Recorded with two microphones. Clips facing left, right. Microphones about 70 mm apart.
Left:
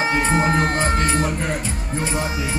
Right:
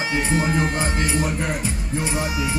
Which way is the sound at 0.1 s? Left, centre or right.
Left.